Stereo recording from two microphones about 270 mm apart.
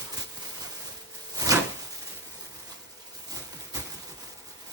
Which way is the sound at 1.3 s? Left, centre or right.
Centre.